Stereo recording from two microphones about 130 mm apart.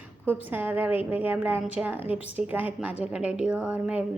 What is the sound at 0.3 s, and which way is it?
A woman's voice, 15° right (ahead or behind).